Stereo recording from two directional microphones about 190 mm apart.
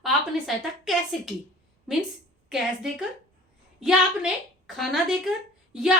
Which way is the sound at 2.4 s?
Centre (ahead or behind).